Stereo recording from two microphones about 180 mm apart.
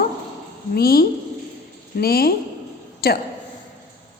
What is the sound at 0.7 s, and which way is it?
Speech, 60° left (ahead or behind).